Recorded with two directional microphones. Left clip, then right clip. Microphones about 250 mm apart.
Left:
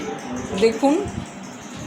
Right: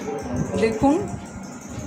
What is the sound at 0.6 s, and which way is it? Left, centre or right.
Speech, centre.